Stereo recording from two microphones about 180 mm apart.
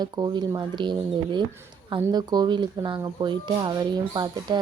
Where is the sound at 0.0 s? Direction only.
25° right (ahead or behind).